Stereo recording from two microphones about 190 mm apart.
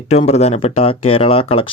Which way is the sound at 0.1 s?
35° left (ahead or behind).